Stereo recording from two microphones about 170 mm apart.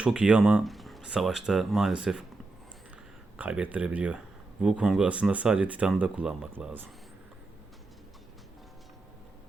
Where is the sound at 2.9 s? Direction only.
10° right (ahead or behind).